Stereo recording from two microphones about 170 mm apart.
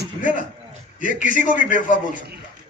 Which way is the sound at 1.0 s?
50° left (ahead or behind).